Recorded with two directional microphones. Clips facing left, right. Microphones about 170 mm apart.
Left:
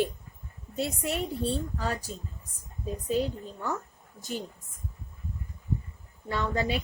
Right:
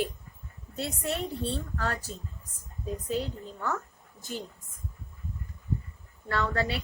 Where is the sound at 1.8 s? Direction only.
10° left (ahead or behind).